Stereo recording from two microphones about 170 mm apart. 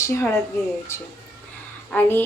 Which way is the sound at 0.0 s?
15° left (ahead or behind).